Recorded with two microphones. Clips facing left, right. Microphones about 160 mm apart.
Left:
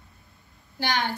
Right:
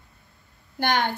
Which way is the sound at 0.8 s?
55° right (ahead or behind).